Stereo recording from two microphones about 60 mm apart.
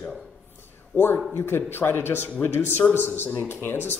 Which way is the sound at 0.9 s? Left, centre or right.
Left.